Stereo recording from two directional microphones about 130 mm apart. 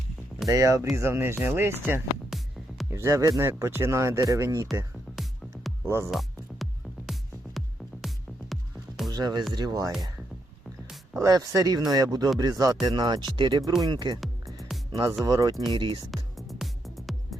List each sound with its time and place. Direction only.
0.4 s speech: 25° right (ahead or behind)
2.3 s music: 5° right (ahead or behind)
2.9 s speech: 25° right (ahead or behind)
5.1 s music: centre (ahead or behind)
5.8 s speech: 20° right (ahead or behind)
6.1 s music: centre (ahead or behind)
9.0 s music: 30° right (ahead or behind)
9.5 s speech: 30° right (ahead or behind)
11.2 s speech: 30° right (ahead or behind)
15.2 s speech: 30° right (ahead or behind)
16.1 s music: centre (ahead or behind)